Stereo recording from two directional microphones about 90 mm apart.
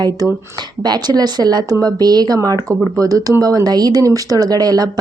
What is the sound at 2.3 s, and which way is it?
Speech, 35° right (ahead or behind).